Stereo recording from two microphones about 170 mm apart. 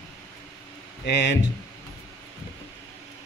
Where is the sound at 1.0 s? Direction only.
80° left.